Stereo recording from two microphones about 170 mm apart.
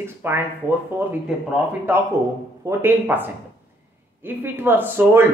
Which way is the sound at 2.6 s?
10° right (ahead or behind).